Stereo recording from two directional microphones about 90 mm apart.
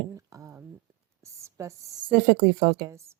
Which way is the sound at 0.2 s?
35° right (ahead or behind).